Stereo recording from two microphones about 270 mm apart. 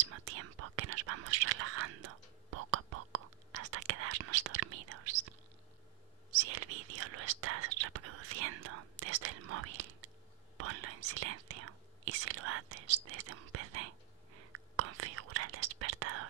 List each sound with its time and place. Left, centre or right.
0.1 s whispering: right
6.5 s whispering: right
13.1 s speech: right
14.8 s whispering: right